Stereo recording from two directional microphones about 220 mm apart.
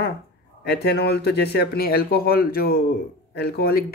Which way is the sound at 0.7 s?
45° left (ahead or behind).